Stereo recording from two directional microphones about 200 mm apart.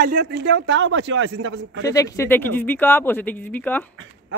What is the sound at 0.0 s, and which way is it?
Speech, 45° right (ahead or behind).